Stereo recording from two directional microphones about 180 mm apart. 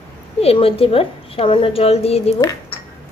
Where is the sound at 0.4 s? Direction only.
35° left (ahead or behind).